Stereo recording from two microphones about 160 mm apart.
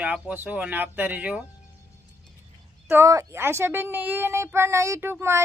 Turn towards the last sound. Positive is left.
turn(degrees=-15)  # may be behind; listen again after turning